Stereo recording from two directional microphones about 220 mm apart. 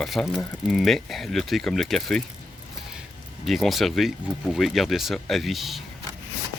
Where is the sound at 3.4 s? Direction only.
Centre (ahead or behind).